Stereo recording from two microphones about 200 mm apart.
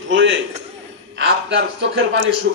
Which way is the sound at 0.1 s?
65° right (ahead or behind).